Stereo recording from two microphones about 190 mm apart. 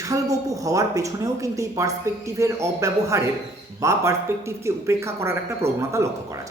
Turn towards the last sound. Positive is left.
turn(degrees=-15)  # may be behind; listen again after turning